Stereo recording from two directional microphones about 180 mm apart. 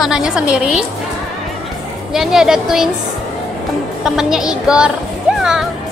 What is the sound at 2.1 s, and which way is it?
Speech, 5° right (ahead or behind).